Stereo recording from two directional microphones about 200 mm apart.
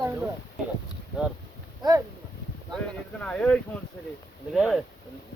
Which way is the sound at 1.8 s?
20° right (ahead or behind).